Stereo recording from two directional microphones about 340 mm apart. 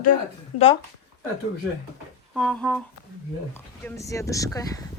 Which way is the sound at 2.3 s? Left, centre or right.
Centre.